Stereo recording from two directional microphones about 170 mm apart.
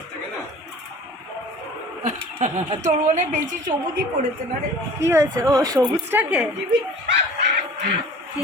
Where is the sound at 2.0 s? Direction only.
40° right (ahead or behind).